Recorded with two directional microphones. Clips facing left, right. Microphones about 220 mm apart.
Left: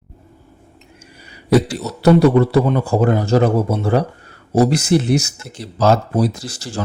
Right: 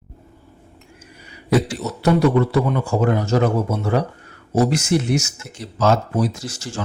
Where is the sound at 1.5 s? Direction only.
35° left (ahead or behind).